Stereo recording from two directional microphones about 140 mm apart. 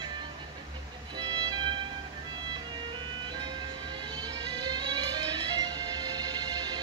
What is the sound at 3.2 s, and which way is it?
Music, 30° right (ahead or behind).